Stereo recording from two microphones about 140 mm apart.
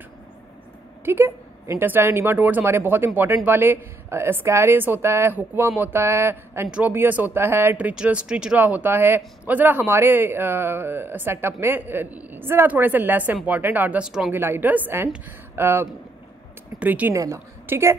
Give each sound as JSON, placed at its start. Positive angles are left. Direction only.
{"t": 1.0, "sound": "speech", "side_deg": -15}
{"t": 14.3, "sound": "speech", "side_deg": -15}
{"t": 17.1, "sound": "a woman's voice", "side_deg": -20}